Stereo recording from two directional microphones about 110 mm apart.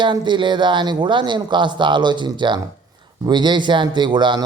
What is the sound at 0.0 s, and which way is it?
Speech, 45° right (ahead or behind).